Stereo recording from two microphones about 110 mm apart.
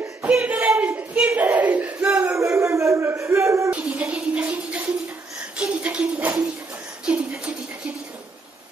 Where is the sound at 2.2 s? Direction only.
25° right (ahead or behind).